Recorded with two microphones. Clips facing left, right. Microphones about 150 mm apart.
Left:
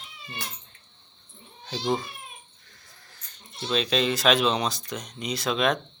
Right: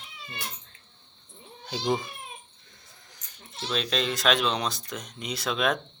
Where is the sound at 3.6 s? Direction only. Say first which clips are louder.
Left 4 dB; centre (ahead or behind).